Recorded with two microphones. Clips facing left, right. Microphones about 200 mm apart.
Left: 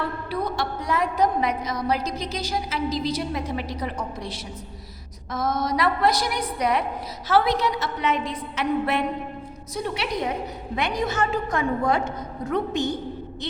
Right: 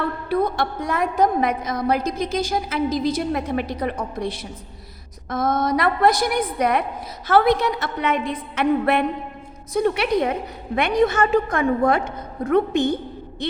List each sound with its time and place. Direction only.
0.3 s a woman's voice: 55° right (ahead or behind)